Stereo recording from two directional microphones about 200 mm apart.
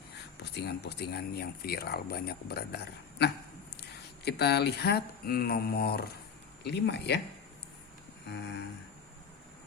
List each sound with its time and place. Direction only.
0.5 s speech: 55° left (ahead or behind)